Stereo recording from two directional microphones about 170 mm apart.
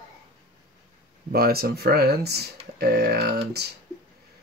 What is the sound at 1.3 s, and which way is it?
Speech, 65° right (ahead or behind).